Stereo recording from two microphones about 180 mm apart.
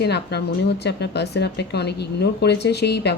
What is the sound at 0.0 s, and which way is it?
Speech, 65° left (ahead or behind).